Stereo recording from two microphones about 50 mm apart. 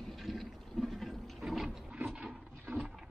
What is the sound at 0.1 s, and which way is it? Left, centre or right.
Water, centre.